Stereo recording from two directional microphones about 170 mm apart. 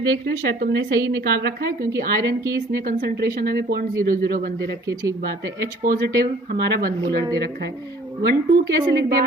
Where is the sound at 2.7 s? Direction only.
55° right (ahead or behind).